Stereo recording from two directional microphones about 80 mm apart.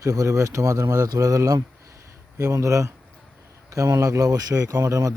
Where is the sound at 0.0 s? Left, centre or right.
Right.